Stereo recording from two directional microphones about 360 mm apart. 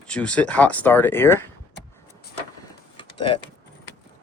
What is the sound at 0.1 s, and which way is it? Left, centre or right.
Speech, centre.